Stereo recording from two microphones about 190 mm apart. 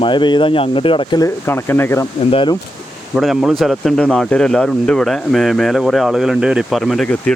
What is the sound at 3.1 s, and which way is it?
Speech, centre (ahead or behind).